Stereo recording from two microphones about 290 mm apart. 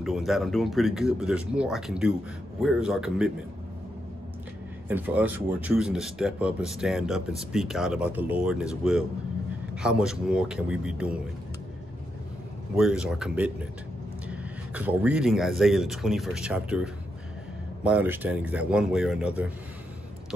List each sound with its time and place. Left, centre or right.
0.0 s speech: centre
4.8 s speech: centre
12.7 s speech: centre